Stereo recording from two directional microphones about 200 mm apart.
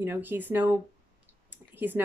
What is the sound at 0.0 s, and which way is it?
Speech, 10° right (ahead or behind).